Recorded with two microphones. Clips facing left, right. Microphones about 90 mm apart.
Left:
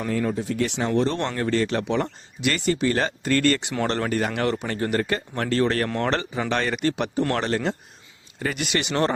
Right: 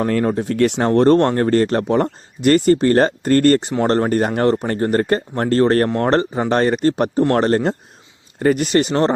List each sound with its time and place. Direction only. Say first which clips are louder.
0.0 s speech: right 7 dB; 55° right (ahead or behind); by 9.1 s 35° right (ahead or behind)